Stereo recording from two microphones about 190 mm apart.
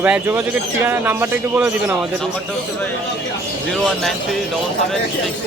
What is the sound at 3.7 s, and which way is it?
Speech, centre (ahead or behind).